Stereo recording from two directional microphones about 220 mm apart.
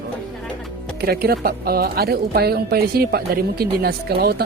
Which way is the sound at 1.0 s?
45° right (ahead or behind).